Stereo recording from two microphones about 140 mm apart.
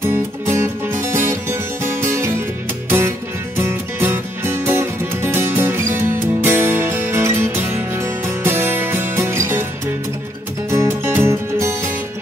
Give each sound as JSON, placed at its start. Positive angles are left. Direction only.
{"t": 0.1, "sound": "music", "side_deg": -20}
{"t": 3.5, "sound": "music", "side_deg": -15}
{"t": 10.7, "sound": "music", "side_deg": -20}